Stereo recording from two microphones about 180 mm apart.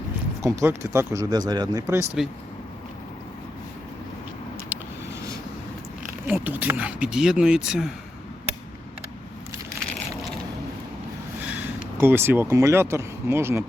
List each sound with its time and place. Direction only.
0.4 s speech: 15° right (ahead or behind)
6.2 s speech: 10° right (ahead or behind)
11.6 s speech: 10° right (ahead or behind)